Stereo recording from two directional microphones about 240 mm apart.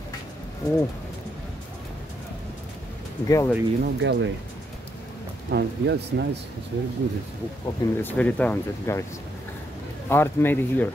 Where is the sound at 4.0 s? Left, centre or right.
Right.